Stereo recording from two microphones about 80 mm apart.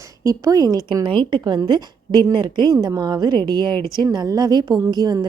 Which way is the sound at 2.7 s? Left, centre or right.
Right.